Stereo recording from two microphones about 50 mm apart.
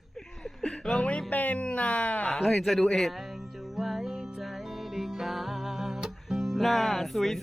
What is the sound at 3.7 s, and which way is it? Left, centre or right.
Music, centre.